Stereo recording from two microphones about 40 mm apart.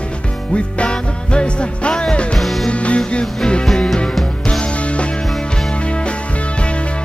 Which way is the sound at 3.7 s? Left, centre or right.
Centre.